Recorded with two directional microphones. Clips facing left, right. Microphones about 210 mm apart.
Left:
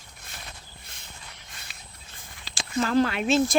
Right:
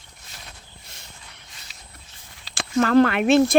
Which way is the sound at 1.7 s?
55° left (ahead or behind).